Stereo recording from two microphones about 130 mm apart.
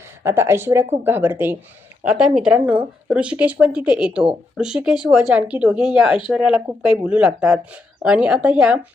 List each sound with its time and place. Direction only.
0.2 s speech: 20° right (ahead or behind)